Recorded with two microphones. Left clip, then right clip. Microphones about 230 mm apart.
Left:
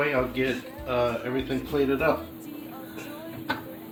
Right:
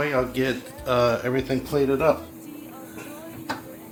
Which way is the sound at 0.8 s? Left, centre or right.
Right.